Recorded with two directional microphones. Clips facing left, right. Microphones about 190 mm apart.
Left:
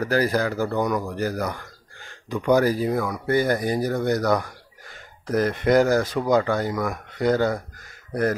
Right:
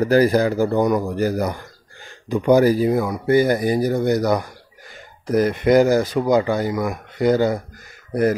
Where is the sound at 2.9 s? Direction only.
20° right (ahead or behind).